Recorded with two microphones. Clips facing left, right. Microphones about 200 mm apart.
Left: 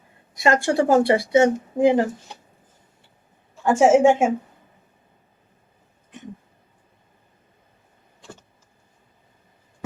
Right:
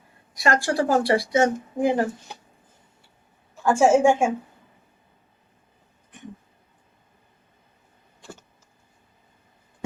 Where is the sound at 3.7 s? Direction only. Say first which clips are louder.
Left 2 dB; 20° left (ahead or behind).